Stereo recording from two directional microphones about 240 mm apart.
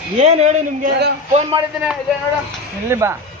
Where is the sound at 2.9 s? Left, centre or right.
Centre.